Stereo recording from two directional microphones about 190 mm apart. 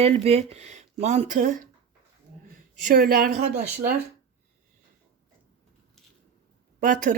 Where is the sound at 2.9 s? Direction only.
50° right (ahead or behind).